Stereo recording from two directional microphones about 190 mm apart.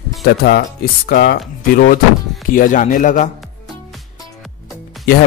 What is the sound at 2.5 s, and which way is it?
Speech, 45° left (ahead or behind).